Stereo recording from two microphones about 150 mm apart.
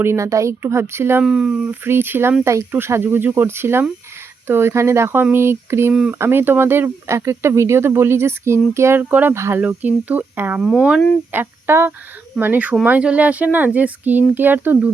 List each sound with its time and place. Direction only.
0.0 s speech: 20° right (ahead or behind)
1.2 s speech: 5° right (ahead or behind)
5.9 s speech: 5° right (ahead or behind)
6.1 s speech: 15° right (ahead or behind)